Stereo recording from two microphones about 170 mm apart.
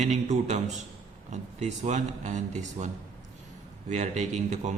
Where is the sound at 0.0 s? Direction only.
45° right (ahead or behind).